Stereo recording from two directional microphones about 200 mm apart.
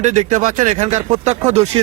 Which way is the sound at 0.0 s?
35° right (ahead or behind).